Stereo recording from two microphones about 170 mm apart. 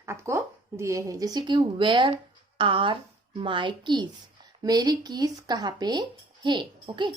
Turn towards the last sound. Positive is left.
turn(degrees=-25)  # may be behind; listen again after turning